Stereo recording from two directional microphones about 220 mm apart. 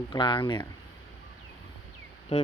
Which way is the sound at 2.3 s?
25° left (ahead or behind).